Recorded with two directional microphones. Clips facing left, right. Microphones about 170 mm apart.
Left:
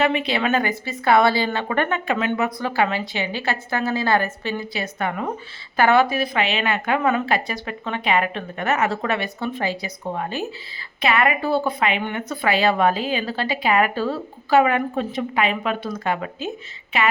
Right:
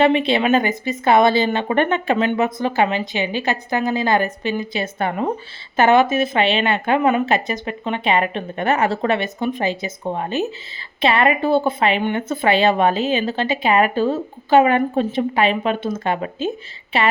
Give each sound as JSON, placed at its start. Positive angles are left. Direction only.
{"t": 0.0, "sound": "a woman's voice", "side_deg": -25}